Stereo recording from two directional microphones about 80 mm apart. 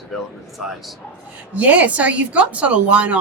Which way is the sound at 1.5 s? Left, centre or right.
Centre.